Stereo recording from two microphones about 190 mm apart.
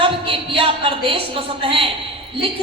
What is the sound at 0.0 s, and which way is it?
A woman's voice, 30° right (ahead or behind).